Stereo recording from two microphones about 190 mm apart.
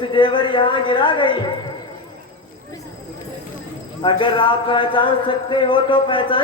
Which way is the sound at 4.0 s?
25° left (ahead or behind).